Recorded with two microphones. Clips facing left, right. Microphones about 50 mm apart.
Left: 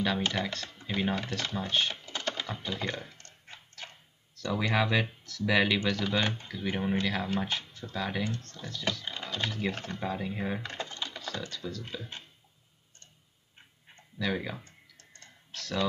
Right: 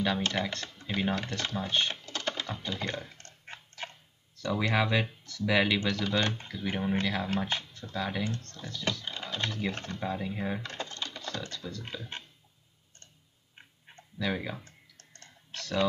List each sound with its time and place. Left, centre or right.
0.4 s speech: centre
2.0 s typing: centre
3.2 s dog: right
4.4 s speech: centre
7.4 s a sound: centre
7.9 s speech: centre
14.1 s speech: centre